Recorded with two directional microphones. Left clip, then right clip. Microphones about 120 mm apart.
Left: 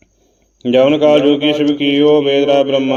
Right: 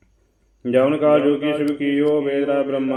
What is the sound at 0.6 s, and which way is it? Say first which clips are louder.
A man's voice: left 6 dB; 35° left (ahead or behind).